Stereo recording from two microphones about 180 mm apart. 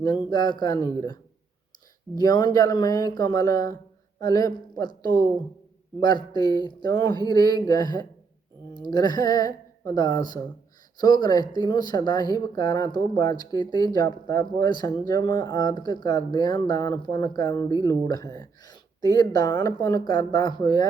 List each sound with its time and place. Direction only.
0.3 s speech: 25° left (ahead or behind)
2.1 s speech: 25° left (ahead or behind)